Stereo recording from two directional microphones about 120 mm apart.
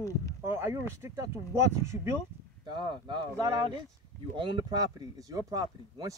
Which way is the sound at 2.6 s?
40° right (ahead or behind).